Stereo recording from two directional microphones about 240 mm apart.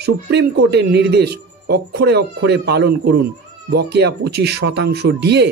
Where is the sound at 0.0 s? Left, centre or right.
Right.